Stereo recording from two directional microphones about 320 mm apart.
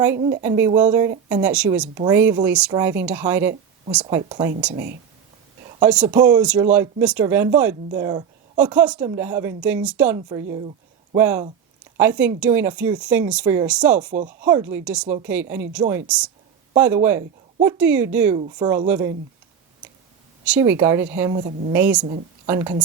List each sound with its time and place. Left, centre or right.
0.2 s a woman's voice: centre
0.4 s a woman's voice: centre
5.8 s a woman's voice: centre
14.0 s a woman's voice: right
14.4 s a woman's voice: centre
18.3 s a woman's voice: centre
20.5 s a woman's voice: centre
21.3 s a woman's voice: right
21.7 s a woman's voice: centre